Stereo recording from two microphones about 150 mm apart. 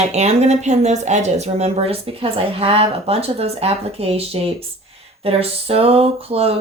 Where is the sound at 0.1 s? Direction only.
45° right (ahead or behind).